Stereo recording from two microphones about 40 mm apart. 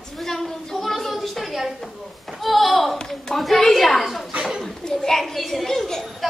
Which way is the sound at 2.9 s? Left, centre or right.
Centre.